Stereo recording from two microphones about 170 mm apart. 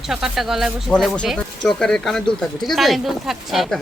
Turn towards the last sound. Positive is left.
turn(degrees=0)  # may be behind; listen again after turning